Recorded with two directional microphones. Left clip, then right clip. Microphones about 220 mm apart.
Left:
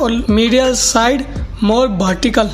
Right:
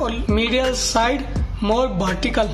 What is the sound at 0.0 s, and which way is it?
Speech, 25° left (ahead or behind).